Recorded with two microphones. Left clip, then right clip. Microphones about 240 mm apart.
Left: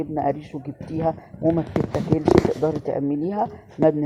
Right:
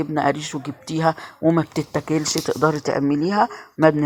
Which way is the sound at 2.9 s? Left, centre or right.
Right.